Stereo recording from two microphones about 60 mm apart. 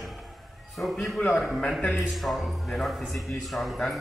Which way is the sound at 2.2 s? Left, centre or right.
Centre.